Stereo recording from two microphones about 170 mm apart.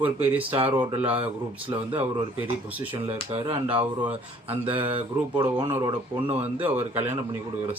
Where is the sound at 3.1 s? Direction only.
35° right (ahead or behind).